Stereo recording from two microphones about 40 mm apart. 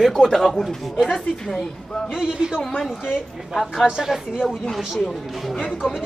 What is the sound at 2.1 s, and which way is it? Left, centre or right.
Speech, centre.